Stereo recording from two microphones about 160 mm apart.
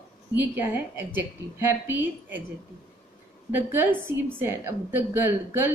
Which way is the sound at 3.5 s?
15° right (ahead or behind).